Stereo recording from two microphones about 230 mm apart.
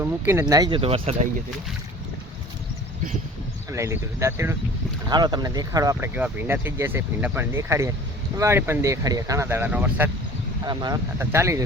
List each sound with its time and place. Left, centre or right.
0.0 s speech: centre
3.7 s speech: centre
10.7 s speech: centre